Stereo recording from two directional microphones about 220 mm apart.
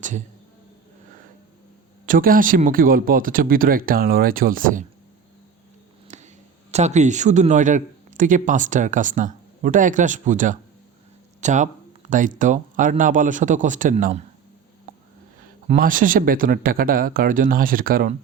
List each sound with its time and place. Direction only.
2.0 s a man's voice: 40° right (ahead or behind)
6.1 s a sound: 35° right (ahead or behind)
6.7 s a man's voice: 30° right (ahead or behind)
15.6 s a man's voice: 35° right (ahead or behind)